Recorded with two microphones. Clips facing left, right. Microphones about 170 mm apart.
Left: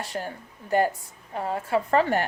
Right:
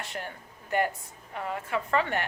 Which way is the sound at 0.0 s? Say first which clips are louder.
Left 5 dB; 35° left (ahead or behind).